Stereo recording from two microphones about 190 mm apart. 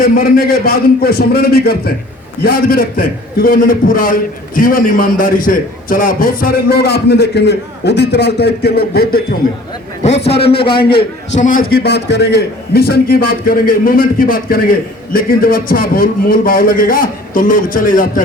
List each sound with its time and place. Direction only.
0.0 s a man's voice: 50° left (ahead or behind)
10.6 s a man's voice: 25° left (ahead or behind)
11.3 s a man's voice: 45° left (ahead or behind)
11.7 s a man's voice: 60° left (ahead or behind)